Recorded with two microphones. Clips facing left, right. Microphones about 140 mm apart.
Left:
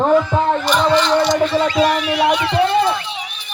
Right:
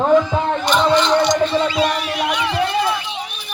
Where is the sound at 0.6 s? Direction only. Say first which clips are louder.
Even; centre (ahead or behind).